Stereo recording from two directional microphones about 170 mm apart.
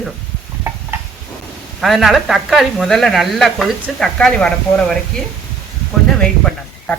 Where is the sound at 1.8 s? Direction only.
Centre (ahead or behind).